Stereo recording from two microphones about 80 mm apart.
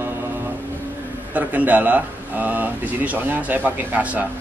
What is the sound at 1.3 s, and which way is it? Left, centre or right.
Speech, centre.